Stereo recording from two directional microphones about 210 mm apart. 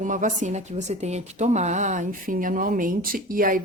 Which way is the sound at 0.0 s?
35° right (ahead or behind).